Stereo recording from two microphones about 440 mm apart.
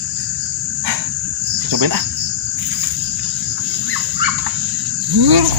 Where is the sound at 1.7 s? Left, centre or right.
Right.